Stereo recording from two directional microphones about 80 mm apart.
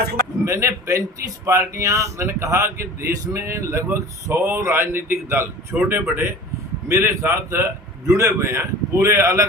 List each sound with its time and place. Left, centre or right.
0.4 s speech: right